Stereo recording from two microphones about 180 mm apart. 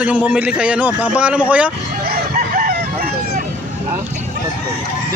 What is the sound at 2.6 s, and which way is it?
Chicken, 50° right (ahead or behind).